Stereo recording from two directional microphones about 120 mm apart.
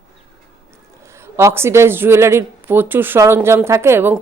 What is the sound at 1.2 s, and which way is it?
A woman's voice, 20° right (ahead or behind).